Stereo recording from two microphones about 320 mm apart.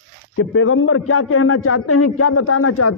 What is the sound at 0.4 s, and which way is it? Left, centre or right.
Speech, left.